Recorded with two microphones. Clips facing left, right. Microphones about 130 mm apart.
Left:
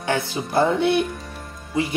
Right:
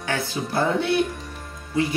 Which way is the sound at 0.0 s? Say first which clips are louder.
Left 3 dB; 20° left (ahead or behind).